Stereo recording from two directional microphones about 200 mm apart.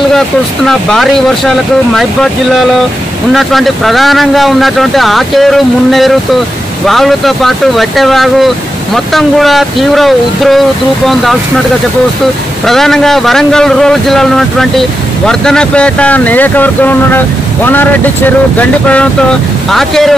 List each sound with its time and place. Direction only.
0.7 s a man's voice: centre (ahead or behind)
3.3 s a man's voice: centre (ahead or behind)
12.6 s a man's voice: centre (ahead or behind)
18.6 s a man's voice: 5° left (ahead or behind)